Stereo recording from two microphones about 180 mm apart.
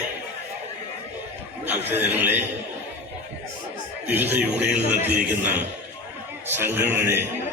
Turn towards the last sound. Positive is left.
turn(degrees=-15)  # may be behind; listen again after turning